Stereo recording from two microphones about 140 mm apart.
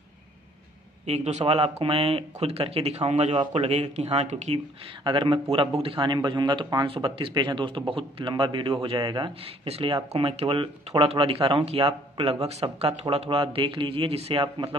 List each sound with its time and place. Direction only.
1.0 s speech: 50° right (ahead or behind)
5.0 s speech: 35° right (ahead or behind)